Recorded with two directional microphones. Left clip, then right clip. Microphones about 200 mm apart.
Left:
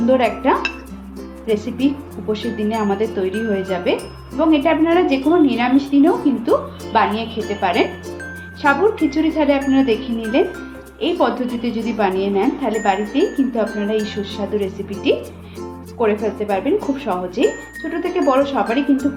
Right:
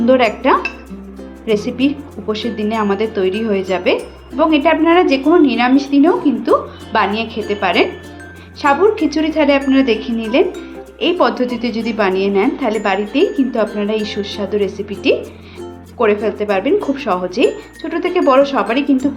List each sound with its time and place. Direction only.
0.0 s speech: 25° right (ahead or behind)
16.0 s speech: 25° right (ahead or behind)